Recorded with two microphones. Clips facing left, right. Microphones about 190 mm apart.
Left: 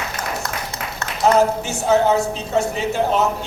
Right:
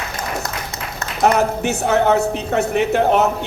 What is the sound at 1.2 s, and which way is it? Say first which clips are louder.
Speech: even; 65° right (ahead or behind).